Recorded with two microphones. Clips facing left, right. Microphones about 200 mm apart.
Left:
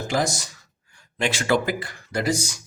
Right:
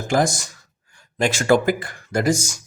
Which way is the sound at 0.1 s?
50° right (ahead or behind).